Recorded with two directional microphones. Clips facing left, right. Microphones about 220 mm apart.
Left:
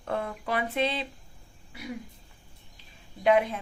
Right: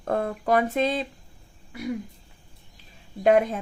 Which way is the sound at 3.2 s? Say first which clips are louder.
Right 4 dB; 45° right (ahead or behind).